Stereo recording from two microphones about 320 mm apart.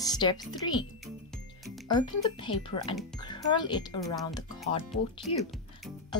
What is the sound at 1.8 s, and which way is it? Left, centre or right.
Speech, centre.